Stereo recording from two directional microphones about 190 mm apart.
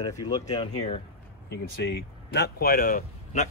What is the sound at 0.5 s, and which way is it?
Speech, 35° left (ahead or behind).